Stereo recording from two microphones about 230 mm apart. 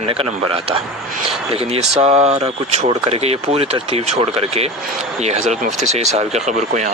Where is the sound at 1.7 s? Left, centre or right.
Right.